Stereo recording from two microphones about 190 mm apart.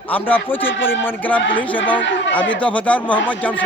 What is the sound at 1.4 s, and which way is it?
Speech, 75° left (ahead or behind).